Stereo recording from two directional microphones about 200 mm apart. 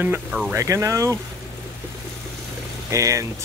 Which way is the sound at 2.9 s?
15° right (ahead or behind).